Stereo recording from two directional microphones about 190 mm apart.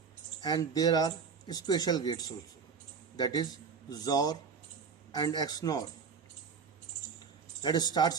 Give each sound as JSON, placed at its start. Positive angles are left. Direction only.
{"t": 0.4, "sound": "a man's voice", "side_deg": 20}
{"t": 7.6, "sound": "speech", "side_deg": 20}